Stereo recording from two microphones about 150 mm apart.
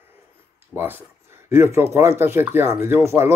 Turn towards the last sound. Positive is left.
turn(degrees=-15)  # may be behind; listen again after turning